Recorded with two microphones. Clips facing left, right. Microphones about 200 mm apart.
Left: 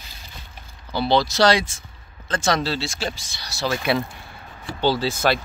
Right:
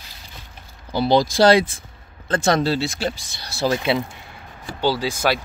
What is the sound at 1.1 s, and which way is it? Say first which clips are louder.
Speech: right 3 dB; 50° right (ahead or behind).